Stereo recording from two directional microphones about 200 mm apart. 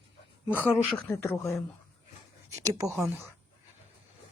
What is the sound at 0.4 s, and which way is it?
Speech, 10° right (ahead or behind).